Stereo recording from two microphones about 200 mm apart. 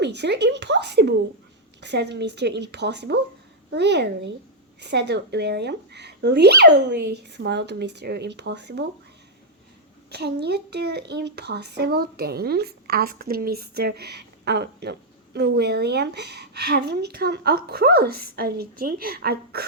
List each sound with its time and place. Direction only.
0.0 s speech: 60° right (ahead or behind)
10.1 s speech: 55° right (ahead or behind)